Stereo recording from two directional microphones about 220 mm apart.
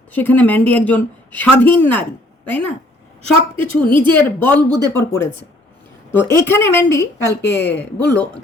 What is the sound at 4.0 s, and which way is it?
A woman's voice, 10° left (ahead or behind).